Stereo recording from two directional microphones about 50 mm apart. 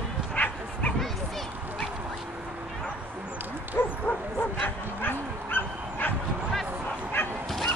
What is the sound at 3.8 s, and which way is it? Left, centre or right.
Bow-wow, left.